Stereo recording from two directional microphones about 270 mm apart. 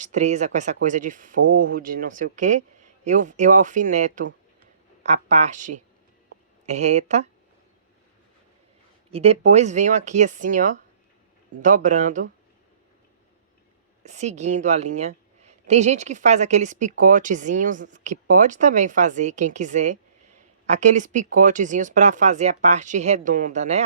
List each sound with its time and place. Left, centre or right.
0.0 s a woman's voice: right
9.0 s a woman's voice: right
14.0 s a woman's voice: right